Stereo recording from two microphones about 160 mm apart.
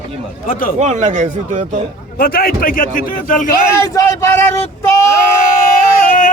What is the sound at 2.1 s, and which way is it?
A man's voice, 65° left (ahead or behind).